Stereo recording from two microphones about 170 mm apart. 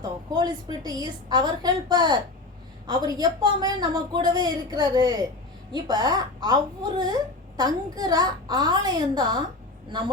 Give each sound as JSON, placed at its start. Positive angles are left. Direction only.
{"t": 0.0, "sound": "a woman's voice", "side_deg": -20}